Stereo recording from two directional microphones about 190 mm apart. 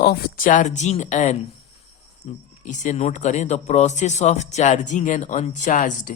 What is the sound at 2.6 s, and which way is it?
Speech, 40° left (ahead or behind).